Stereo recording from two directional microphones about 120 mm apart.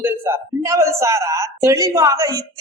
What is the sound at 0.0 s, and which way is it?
A woman's voice, 25° right (ahead or behind).